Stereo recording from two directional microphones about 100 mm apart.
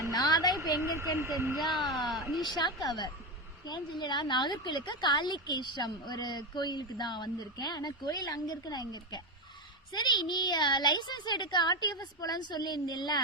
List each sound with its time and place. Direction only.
0.1 s a sound: 40° left (ahead or behind)
1.1 s speech: 30° right (ahead or behind)
1.5 s a woman's voice: centre (ahead or behind)
2.5 s a woman's voice: 45° left (ahead or behind)